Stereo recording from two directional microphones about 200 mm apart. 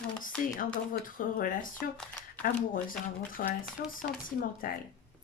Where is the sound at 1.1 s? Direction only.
45° left (ahead or behind).